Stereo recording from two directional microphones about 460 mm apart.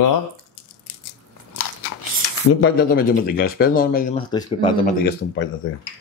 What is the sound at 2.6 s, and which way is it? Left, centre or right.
Speech, centre.